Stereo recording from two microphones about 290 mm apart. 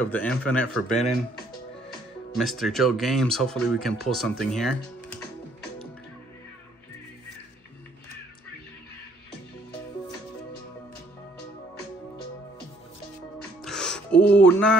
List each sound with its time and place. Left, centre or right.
0.0 s speech: centre
2.3 s speech: centre
13.6 s music: centre